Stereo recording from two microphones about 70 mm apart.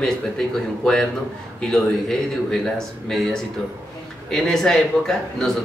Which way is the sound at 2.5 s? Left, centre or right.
Centre.